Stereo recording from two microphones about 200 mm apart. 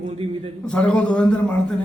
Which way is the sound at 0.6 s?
5° left (ahead or behind).